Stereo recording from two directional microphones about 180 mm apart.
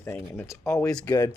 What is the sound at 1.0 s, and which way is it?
Speech, 20° left (ahead or behind).